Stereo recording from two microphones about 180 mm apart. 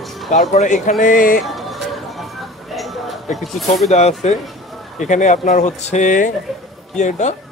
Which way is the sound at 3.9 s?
40° left (ahead or behind).